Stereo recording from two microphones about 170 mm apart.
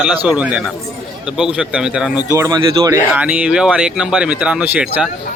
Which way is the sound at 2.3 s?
20° right (ahead or behind).